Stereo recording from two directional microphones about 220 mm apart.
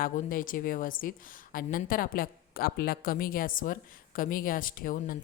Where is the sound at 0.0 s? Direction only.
40° left (ahead or behind).